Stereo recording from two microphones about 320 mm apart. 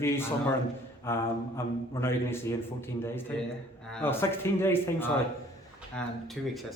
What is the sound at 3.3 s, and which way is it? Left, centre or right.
A man's voice, centre.